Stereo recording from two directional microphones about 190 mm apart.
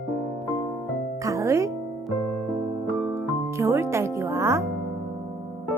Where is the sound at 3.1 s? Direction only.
15° right (ahead or behind).